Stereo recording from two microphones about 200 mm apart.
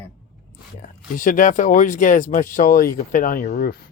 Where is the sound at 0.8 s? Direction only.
40° left (ahead or behind).